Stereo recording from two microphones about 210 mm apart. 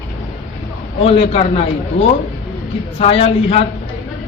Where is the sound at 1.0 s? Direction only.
25° left (ahead or behind).